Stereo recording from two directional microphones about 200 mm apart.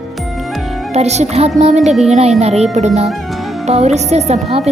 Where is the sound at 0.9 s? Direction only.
35° right (ahead or behind).